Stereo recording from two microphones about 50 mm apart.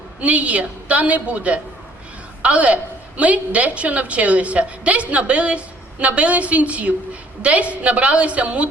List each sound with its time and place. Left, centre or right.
0.2 s a woman's voice: right